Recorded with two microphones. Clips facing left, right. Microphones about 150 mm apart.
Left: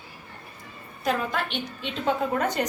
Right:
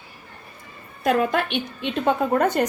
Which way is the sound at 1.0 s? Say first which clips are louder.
Right 6 dB; 60° right (ahead or behind).